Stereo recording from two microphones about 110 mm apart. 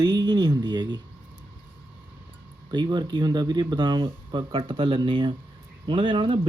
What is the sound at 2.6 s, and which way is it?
Speech, 45° right (ahead or behind).